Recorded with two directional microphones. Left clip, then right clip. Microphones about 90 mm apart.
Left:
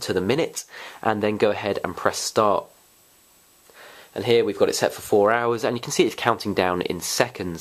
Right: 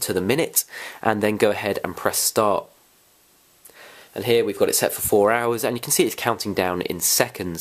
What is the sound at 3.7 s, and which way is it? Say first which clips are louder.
Speech: even; 35° right (ahead or behind).